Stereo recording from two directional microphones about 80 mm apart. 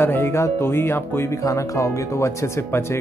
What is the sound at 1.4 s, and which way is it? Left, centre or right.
Speech, left.